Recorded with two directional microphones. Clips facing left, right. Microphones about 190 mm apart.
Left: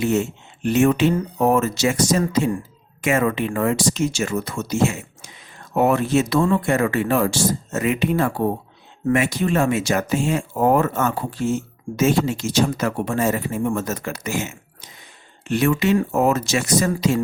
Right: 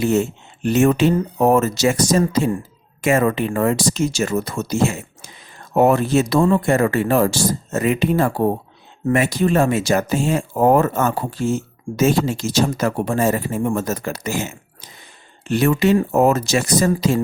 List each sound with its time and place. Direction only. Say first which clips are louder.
0.0 s speech: right 2 dB; 35° right (ahead or behind)